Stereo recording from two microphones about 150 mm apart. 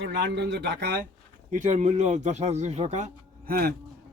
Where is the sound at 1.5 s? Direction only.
55° right (ahead or behind).